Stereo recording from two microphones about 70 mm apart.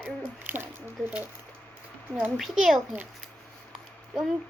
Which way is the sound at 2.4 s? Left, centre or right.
Centre.